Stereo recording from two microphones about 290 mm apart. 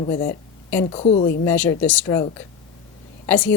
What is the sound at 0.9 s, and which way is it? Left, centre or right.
Speech, left.